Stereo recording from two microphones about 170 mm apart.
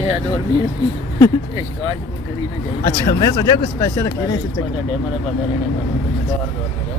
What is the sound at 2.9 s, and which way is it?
Speech, 25° left (ahead or behind).